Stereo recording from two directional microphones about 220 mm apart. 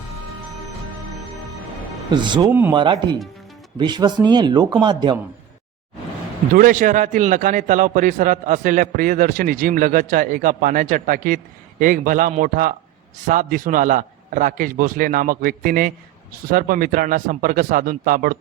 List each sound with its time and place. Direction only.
2.0 s speech: 20° right (ahead or behind)
2.5 s speech: 10° right (ahead or behind)
2.7 s speech: 20° right (ahead or behind)
6.5 s a man's voice: 40° right (ahead or behind)